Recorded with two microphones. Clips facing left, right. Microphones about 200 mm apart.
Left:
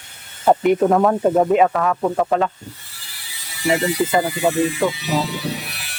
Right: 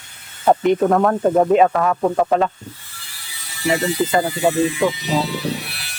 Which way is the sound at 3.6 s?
10° left (ahead or behind).